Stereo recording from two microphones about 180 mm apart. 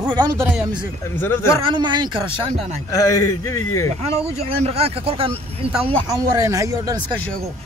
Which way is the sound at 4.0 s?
35° right (ahead or behind).